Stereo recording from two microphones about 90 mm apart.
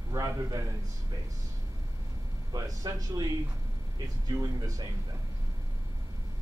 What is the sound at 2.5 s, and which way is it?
Speech, 45° right (ahead or behind).